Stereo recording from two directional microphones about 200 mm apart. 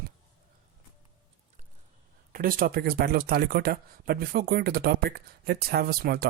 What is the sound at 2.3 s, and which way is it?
Speech, 45° right (ahead or behind).